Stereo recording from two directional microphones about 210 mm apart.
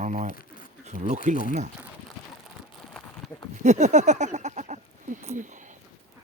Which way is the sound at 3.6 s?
35° right (ahead or behind).